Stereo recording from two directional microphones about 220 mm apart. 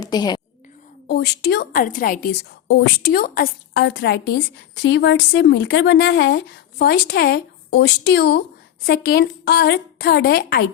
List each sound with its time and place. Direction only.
0.0 s whispering: 20° left (ahead or behind)
1.0 s a woman's voice: 45° left (ahead or behind)